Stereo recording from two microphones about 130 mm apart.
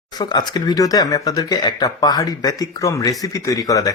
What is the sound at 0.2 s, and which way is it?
Speech, 30° left (ahead or behind).